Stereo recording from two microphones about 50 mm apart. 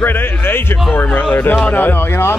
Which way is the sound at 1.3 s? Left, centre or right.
Left.